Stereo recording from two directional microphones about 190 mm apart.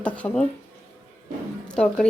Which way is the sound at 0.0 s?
5° left (ahead or behind).